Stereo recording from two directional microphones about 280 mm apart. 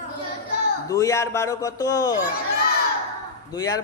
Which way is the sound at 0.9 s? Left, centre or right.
Centre.